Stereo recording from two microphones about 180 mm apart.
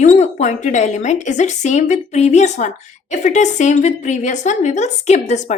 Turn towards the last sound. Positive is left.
turn(degrees=40)  # may be behind; listen again after turning